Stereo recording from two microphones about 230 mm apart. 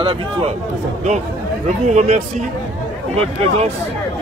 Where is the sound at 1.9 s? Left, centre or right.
Right.